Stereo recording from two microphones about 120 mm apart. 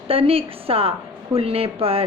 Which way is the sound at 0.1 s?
50° right (ahead or behind).